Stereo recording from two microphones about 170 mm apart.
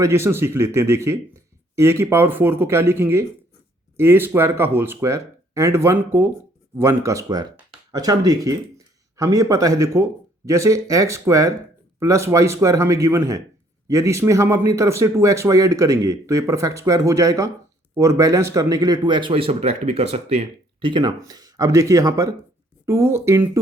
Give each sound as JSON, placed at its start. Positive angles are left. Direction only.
{"t": 0.0, "sound": "speech", "side_deg": -15}